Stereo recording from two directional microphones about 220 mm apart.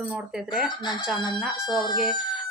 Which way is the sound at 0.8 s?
20° left (ahead or behind).